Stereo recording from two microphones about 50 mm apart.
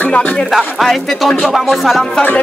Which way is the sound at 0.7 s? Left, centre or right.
Centre.